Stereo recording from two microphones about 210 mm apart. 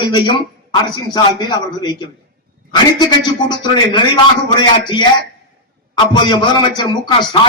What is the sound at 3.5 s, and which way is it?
A man's voice, 20° left (ahead or behind).